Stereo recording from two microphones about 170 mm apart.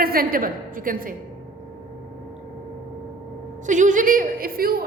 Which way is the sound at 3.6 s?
45° right (ahead or behind).